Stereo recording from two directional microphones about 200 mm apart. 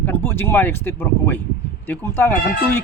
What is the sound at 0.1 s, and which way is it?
Speech, 10° left (ahead or behind).